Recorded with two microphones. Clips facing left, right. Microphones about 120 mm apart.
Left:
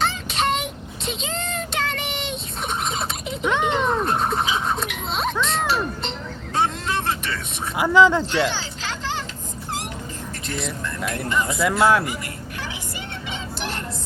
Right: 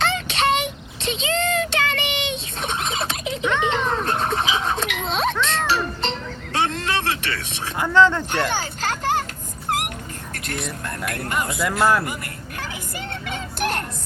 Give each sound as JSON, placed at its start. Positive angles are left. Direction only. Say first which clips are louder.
{"t": 0.0, "sound": "child singing", "louder": "right 2 dB", "side_deg": -85}
{"t": 3.7, "sound": "music", "louder": "left 1 dB", "side_deg": -90}
{"t": 7.8, "sound": "speech", "louder": "left 1 dB", "side_deg": 10}
{"t": 8.3, "sound": "music", "louder": "left 1 dB", "side_deg": -50}
{"t": 9.6, "sound": "dog", "louder": "right 6 dB", "side_deg": -60}
{"t": 10.4, "sound": "speech", "louder": "even", "side_deg": -60}
{"t": 11.6, "sound": "speech", "louder": "left 1 dB", "side_deg": 0}
{"t": 13.3, "sound": "music", "louder": "right 6 dB", "side_deg": -55}